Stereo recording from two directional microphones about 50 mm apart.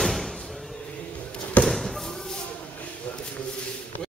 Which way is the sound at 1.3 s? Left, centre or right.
Left.